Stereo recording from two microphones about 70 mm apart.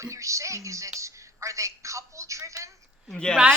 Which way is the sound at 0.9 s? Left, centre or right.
Right.